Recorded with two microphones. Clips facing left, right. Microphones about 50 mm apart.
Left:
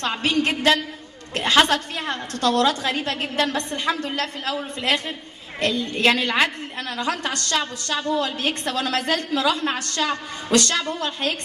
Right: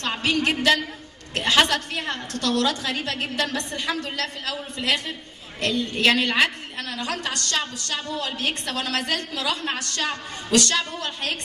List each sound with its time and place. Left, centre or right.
0.0 s a woman's voice: left